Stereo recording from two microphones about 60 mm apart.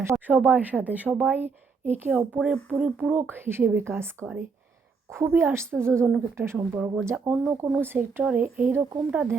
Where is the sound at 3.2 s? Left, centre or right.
Right.